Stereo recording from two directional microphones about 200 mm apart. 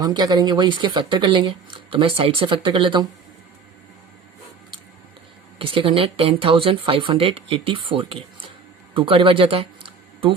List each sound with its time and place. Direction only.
0.0 s speech: 20° right (ahead or behind)
5.5 s speech: 25° right (ahead or behind)